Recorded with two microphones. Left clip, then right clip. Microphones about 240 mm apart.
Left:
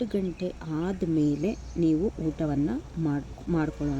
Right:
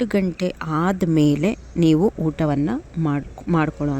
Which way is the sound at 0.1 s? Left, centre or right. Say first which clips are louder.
Right 8 dB; right.